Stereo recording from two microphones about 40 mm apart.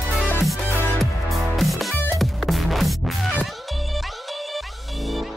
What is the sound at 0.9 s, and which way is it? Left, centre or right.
Music, centre.